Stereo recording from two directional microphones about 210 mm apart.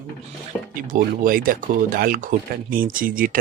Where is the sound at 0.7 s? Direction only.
40° right (ahead or behind).